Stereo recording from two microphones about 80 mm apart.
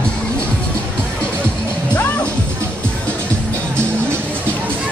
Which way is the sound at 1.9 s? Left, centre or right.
Centre.